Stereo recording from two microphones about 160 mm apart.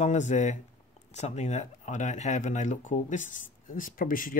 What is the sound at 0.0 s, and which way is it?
Speech, 45° left (ahead or behind).